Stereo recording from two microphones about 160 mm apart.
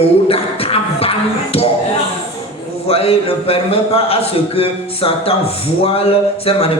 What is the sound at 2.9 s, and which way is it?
A man's voice, 40° left (ahead or behind).